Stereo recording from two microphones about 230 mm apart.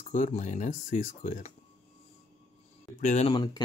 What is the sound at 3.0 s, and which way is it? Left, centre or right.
Speech, left.